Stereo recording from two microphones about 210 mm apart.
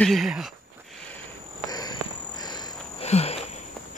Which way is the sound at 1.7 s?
20° left (ahead or behind).